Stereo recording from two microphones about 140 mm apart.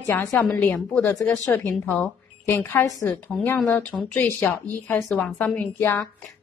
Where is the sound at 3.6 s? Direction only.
5° left (ahead or behind).